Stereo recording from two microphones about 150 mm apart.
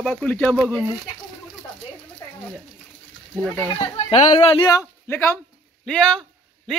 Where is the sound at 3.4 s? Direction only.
10° right (ahead or behind).